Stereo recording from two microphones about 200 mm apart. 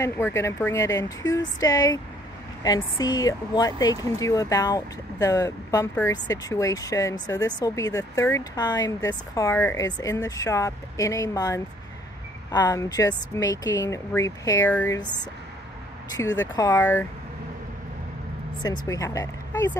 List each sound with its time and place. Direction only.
0.0 s speech: 15° left (ahead or behind)
16.3 s speech: 15° left (ahead or behind)
18.6 s speech: 15° left (ahead or behind)